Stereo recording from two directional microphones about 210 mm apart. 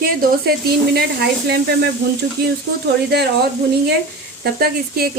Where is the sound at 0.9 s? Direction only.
50° right (ahead or behind).